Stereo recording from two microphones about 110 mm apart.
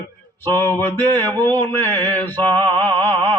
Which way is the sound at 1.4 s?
15° left (ahead or behind).